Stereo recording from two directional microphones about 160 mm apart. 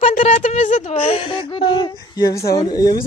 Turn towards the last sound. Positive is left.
turn(degrees=25)  # may be behind; listen again after turning